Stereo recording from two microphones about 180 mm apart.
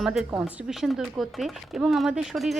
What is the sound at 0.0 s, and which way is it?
Speech, centre (ahead or behind).